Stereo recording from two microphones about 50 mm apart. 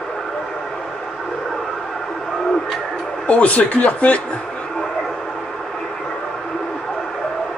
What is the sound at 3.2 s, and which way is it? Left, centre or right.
Speech, left.